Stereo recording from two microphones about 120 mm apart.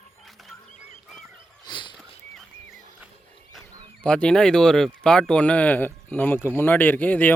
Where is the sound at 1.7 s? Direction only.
40° left (ahead or behind).